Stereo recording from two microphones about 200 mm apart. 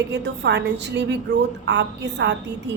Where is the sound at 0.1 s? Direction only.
60° right (ahead or behind).